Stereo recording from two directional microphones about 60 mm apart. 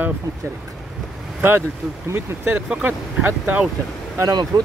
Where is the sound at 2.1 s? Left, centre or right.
Right.